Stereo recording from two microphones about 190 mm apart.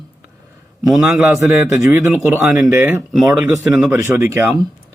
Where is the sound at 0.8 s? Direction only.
Centre (ahead or behind).